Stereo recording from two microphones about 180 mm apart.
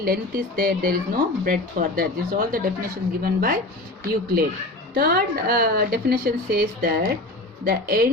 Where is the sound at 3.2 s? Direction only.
55° right (ahead or behind).